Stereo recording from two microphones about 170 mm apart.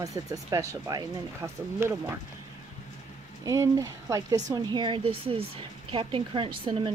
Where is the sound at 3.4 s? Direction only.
20° right (ahead or behind).